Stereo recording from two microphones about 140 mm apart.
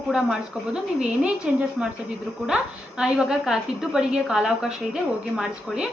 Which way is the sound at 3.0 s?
5° right (ahead or behind).